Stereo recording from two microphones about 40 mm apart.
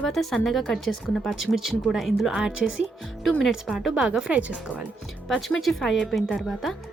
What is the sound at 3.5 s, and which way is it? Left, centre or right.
Speech, centre.